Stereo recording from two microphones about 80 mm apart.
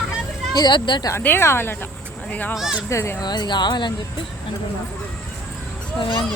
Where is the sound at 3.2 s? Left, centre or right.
Left.